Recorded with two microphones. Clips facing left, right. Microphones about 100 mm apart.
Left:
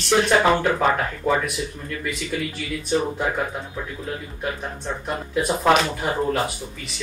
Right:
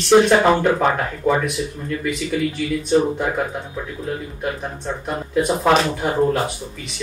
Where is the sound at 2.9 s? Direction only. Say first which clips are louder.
Right 4 dB; centre (ahead or behind).